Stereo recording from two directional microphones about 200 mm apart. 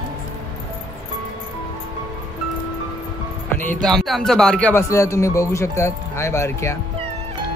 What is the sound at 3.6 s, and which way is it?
Speech, centre (ahead or behind).